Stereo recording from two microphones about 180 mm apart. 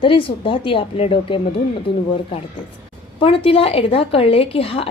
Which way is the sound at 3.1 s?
30° left (ahead or behind).